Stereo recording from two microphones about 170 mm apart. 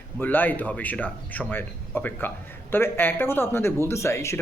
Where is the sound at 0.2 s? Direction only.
10° left (ahead or behind).